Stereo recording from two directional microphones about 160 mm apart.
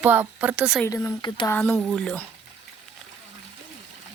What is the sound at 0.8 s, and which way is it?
Speech, 20° left (ahead or behind).